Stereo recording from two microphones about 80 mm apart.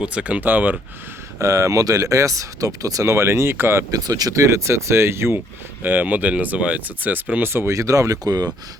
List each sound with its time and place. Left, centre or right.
0.0 s speech: centre
1.4 s speech: right
3.9 s speech: right
5.8 s speech: right